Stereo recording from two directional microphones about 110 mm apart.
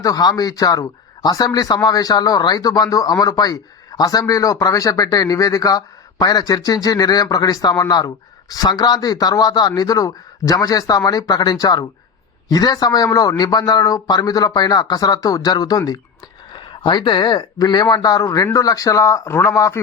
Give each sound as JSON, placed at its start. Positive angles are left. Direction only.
{"t": 0.0, "sound": "speech", "side_deg": 35}